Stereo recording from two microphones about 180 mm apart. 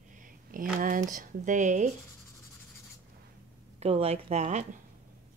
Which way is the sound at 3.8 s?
35° right (ahead or behind).